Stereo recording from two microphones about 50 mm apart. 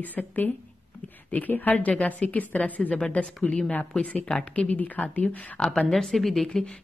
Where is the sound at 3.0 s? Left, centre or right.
Left.